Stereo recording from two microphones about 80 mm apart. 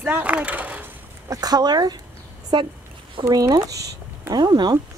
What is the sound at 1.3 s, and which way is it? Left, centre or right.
Speech, right.